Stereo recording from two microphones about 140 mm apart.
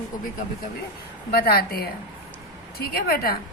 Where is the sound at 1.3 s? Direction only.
90° left.